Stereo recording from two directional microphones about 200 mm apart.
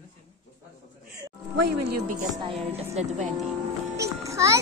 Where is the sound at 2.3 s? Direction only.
25° right (ahead or behind).